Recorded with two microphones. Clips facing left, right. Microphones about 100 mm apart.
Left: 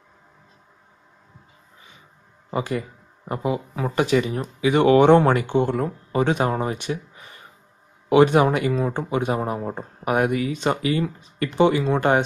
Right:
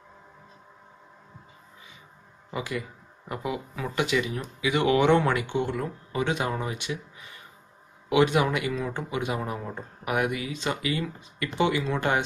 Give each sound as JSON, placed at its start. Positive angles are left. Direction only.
{"t": 2.5, "sound": "speech", "side_deg": 40}